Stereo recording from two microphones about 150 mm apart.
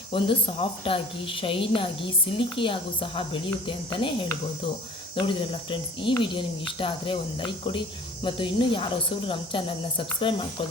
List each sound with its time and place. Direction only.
0.1 s speech: 35° left (ahead or behind)